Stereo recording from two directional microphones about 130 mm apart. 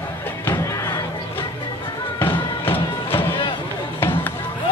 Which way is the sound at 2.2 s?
45° left (ahead or behind).